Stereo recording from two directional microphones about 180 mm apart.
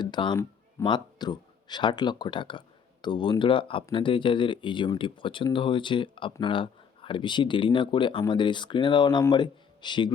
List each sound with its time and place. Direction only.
0.0 s speech: 25° left (ahead or behind)